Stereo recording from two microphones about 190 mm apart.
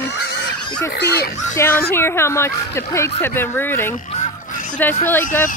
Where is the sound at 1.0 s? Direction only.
60° left (ahead or behind).